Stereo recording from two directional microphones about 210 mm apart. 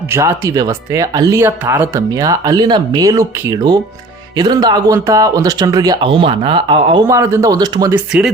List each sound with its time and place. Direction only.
0.1 s speech: 10° right (ahead or behind)
7.1 s speech: 15° right (ahead or behind)